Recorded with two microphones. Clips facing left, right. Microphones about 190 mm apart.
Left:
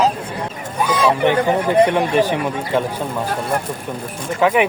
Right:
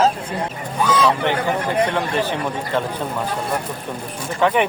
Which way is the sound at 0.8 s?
10° left (ahead or behind).